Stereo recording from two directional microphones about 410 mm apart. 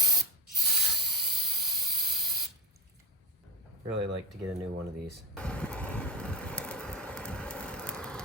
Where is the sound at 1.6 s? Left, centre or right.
Centre.